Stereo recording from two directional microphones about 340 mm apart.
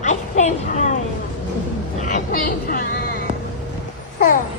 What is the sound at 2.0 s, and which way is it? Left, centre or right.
Vehicle, left.